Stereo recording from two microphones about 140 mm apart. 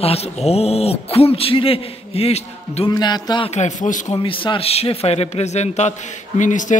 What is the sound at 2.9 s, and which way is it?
Speech, 30° left (ahead or behind).